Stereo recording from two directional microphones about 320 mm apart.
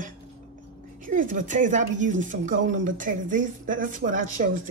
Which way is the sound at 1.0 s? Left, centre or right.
Right.